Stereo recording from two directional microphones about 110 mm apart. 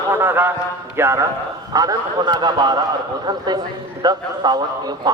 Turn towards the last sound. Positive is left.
turn(degrees=-40)  # may be behind; listen again after turning